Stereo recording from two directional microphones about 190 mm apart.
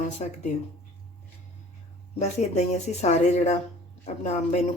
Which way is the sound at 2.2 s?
35° left (ahead or behind).